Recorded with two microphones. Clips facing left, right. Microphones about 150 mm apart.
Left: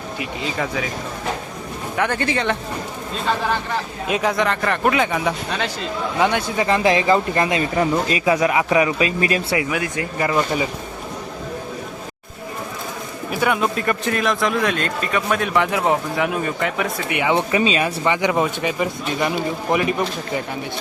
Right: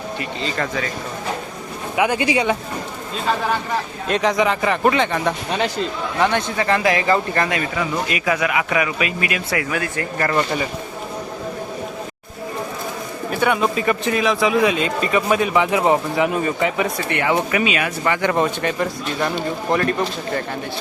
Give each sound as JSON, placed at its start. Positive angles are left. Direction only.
{"t": 0.2, "sound": "speech", "side_deg": 5}
{"t": 2.0, "sound": "speech", "side_deg": -10}
{"t": 4.1, "sound": "a man's voice", "side_deg": 5}
{"t": 7.8, "sound": "speech", "side_deg": 30}
{"t": 9.6, "sound": "a man's voice", "side_deg": 15}
{"t": 13.3, "sound": "speech", "side_deg": 0}
{"t": 17.1, "sound": "a man's voice", "side_deg": 15}
{"t": 17.3, "sound": "speech", "side_deg": 30}
{"t": 18.0, "sound": "a man's voice", "side_deg": 15}
{"t": 18.3, "sound": "a man's voice", "side_deg": 5}